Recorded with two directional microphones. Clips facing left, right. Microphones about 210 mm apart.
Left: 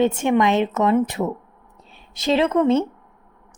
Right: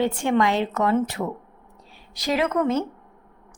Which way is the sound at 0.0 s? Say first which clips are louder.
Left 3 dB; 20° left (ahead or behind).